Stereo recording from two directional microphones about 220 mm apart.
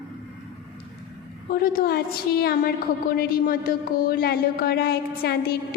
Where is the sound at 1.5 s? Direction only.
40° left (ahead or behind).